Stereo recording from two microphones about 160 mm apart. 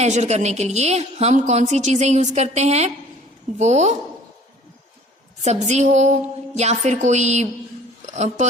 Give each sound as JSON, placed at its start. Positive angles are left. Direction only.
{"t": 0.0, "sound": "a woman's voice", "side_deg": -45}
{"t": 5.4, "sound": "a woman's voice", "side_deg": -45}